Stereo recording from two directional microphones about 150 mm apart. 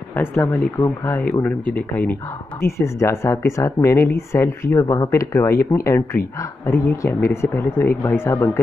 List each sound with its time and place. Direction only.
0.1 s speech: 15° left (ahead or behind)